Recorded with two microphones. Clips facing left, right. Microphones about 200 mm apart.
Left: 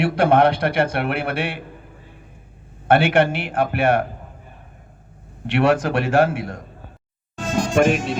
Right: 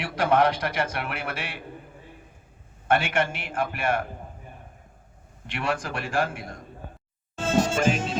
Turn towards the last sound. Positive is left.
turn(degrees=60)  # may be behind; listen again after turning